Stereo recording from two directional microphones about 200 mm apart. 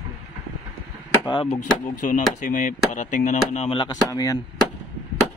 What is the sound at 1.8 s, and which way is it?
Speech, 40° left (ahead or behind).